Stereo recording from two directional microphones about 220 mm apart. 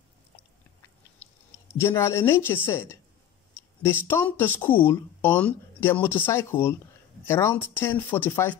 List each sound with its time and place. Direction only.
1.7 s speech: 10° left (ahead or behind)
4.1 s speech: 10° left (ahead or behind)